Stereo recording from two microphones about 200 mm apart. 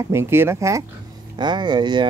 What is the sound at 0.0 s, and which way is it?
Speech, 15° right (ahead or behind).